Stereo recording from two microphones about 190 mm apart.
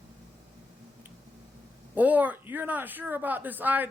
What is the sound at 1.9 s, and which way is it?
A woman's voice, 10° right (ahead or behind).